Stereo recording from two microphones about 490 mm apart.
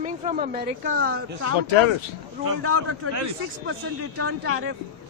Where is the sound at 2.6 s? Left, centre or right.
Right.